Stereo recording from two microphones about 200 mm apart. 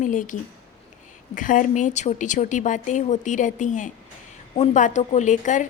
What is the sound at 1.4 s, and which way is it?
A woman's voice, 40° left (ahead or behind).